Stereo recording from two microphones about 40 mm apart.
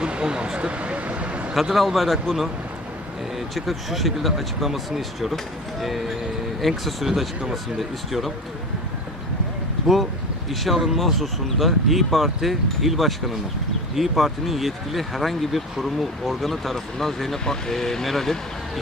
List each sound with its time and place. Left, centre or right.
0.0 s a sound: right
1.7 s speech: centre
3.3 s speech: centre
9.8 s speech: centre